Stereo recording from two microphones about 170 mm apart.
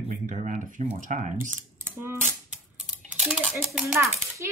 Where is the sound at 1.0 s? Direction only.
45° right (ahead or behind).